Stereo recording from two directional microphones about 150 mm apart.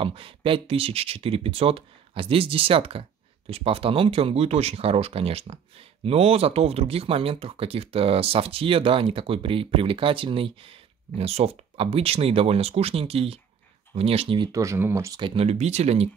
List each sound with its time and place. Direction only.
0.0 s speech: 35° right (ahead or behind)
14.5 s speech: 20° right (ahead or behind)
15.1 s speech: 35° right (ahead or behind)